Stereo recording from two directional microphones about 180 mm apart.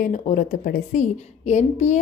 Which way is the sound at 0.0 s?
45° left (ahead or behind).